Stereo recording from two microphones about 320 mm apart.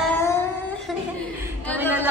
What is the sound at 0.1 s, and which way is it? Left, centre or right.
Music, centre.